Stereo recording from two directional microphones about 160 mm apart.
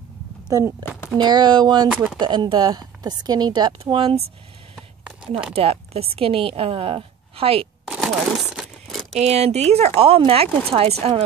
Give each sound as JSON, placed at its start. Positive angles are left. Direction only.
{"t": 0.5, "sound": "a woman's voice", "side_deg": -20}
{"t": 4.7, "sound": "a sound", "side_deg": -5}
{"t": 5.5, "sound": "a woman's voice", "side_deg": -40}
{"t": 7.9, "sound": "crumpling", "side_deg": -5}
{"t": 9.1, "sound": "a woman's voice", "side_deg": -40}